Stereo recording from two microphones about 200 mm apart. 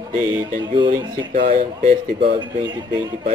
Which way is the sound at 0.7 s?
25° right (ahead or behind).